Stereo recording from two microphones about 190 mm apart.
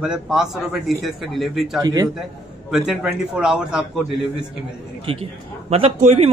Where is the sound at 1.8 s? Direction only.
20° right (ahead or behind).